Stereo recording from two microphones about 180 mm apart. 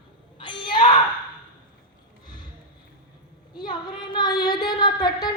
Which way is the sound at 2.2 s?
25° left (ahead or behind).